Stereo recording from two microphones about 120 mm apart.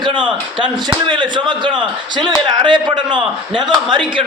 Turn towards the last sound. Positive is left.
turn(degrees=-45)  # may be behind; listen again after turning